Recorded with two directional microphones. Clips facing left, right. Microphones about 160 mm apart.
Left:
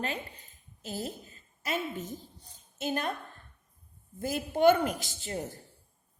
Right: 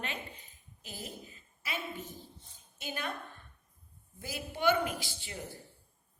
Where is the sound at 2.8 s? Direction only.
45° left (ahead or behind).